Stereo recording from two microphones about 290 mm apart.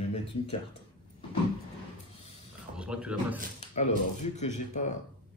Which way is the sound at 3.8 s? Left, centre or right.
Left.